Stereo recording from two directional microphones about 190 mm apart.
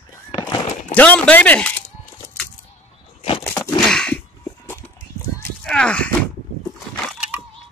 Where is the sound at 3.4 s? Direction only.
15° left (ahead or behind).